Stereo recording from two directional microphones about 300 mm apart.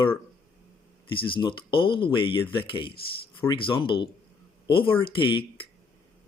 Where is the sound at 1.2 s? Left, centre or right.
Centre.